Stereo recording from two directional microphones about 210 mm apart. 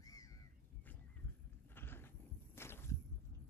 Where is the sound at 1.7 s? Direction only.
10° left (ahead or behind).